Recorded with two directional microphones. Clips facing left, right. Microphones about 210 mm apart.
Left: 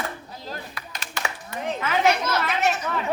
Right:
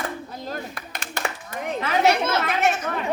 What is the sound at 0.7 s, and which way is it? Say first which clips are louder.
Clapping: right 2 dB; 50° right (ahead or behind).